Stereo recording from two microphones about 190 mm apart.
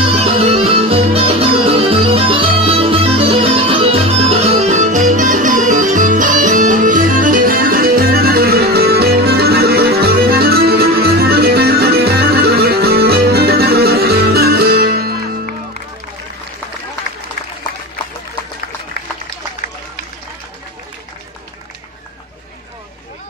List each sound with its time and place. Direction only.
0.0 s music: 30° right (ahead or behind); by 15.5 s 55° right (ahead or behind)